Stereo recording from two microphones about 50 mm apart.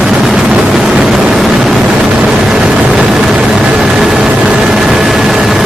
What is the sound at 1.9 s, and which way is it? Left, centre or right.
Vehicle, centre.